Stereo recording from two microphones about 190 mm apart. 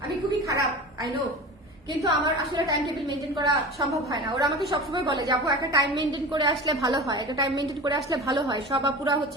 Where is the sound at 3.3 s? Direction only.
15° right (ahead or behind).